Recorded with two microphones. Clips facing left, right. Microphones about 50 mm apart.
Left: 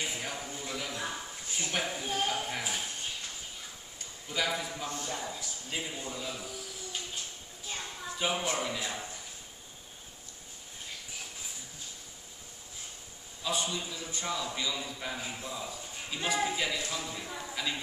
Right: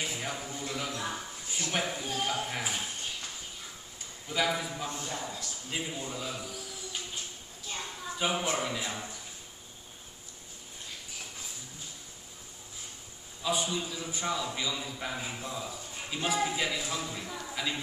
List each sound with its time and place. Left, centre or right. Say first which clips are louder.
0.1 s a sound: right 1 dB; centre
1.7 s speech: right 1 dB; centre
4.3 s a man's voice: right 2 dB; centre
7.7 s a sound: right 1 dB; centre
8.5 s a man's voice: right 1 dB; centre
13.4 s a man's voice: right 2 dB; centre
16.7 s speech: right 1 dB; right
17.0 s speech: right 1 dB; centre
17.5 s a sound: right 1 dB; centre